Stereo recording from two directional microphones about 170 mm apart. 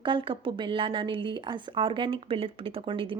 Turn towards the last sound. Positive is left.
turn(degrees=-30)  # may be behind; listen again after turning